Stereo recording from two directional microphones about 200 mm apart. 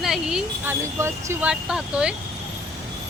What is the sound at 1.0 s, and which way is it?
Speech, 15° right (ahead or behind).